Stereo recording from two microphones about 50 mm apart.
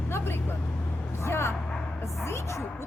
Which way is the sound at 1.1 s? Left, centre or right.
Left.